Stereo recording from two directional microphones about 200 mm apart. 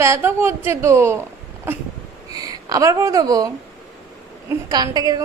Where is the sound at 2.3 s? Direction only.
20° right (ahead or behind).